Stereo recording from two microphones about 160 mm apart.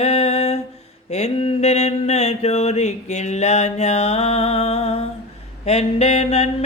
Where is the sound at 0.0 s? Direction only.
40° left (ahead or behind).